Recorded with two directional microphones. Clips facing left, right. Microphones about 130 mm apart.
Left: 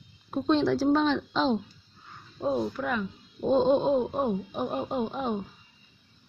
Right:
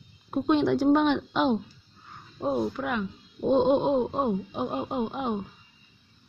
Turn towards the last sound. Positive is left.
turn(degrees=-15)  # may be behind; listen again after turning